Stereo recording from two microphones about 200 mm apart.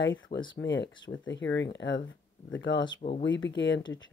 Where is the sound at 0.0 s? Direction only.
65° left (ahead or behind).